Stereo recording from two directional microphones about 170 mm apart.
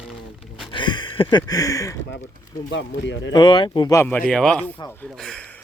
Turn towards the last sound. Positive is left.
turn(degrees=5)  # may be behind; listen again after turning